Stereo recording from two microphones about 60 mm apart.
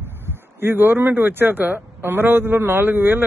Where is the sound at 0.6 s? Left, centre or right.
Right.